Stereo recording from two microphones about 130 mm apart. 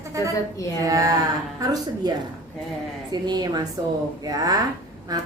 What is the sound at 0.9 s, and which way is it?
Speech, 25° right (ahead or behind).